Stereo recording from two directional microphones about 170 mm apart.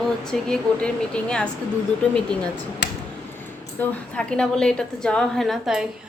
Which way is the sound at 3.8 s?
10° left (ahead or behind).